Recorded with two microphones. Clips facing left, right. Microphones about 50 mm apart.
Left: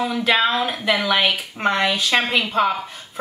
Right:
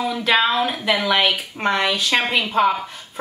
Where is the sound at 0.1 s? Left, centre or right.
Centre.